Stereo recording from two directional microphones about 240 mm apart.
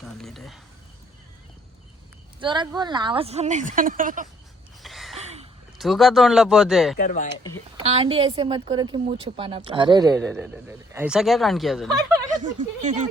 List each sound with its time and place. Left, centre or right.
0.0 s speech: centre
2.4 s speech: centre
4.8 s a sound: centre
5.1 s a sound: right
5.7 s speech: centre
6.9 s speech: left
7.8 s speech: right
10.0 s speech: centre
10.4 s speech: centre
12.2 s speech: right